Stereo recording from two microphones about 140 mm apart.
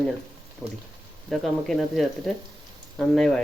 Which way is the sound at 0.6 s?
15° left (ahead or behind).